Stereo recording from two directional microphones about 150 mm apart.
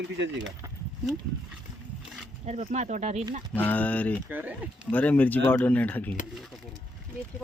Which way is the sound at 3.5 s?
10° left (ahead or behind).